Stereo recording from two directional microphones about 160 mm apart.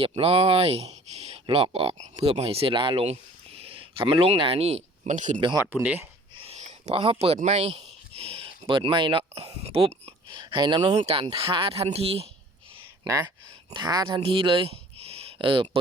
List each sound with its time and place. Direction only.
0.0 s speech: 35° right (ahead or behind)
5.7 s speech: 10° right (ahead or behind)
6.3 s a sound: 35° right (ahead or behind)
7.3 s speech: 45° right (ahead or behind)
13.1 s speech: 15° right (ahead or behind)
13.7 s speech: 30° right (ahead or behind)